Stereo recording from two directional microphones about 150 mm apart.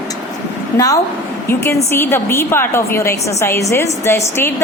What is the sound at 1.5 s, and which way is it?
A woman's voice, 15° left (ahead or behind).